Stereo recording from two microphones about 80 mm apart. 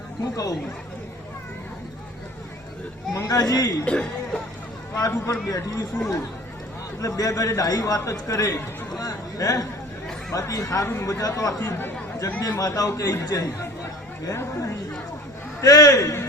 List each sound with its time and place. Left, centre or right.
0.2 s a man's voice: left
3.1 s a man's voice: left
3.8 s speech: centre
5.1 s a man's voice: left
7.0 s a man's voice: left
11.7 s speech: left
12.4 s a man's voice: left
14.3 s a woman's voice: left
15.6 s a man's voice: left